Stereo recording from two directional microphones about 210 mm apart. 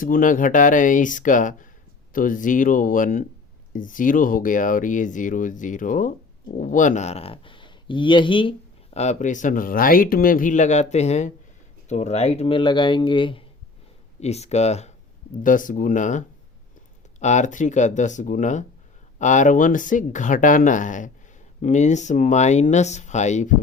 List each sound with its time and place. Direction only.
0.0 s speech: 40° left (ahead or behind)